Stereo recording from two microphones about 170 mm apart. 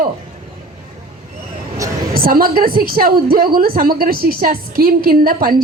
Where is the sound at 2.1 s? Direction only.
60° right (ahead or behind).